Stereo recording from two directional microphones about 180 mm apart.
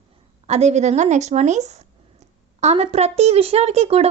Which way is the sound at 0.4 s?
40° right (ahead or behind).